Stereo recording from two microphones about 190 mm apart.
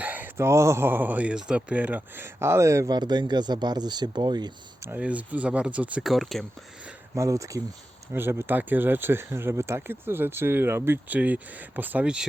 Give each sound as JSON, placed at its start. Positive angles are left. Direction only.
{"t": 0.0, "sound": "speech", "side_deg": -10}
{"t": 7.2, "sound": "speech", "side_deg": -15}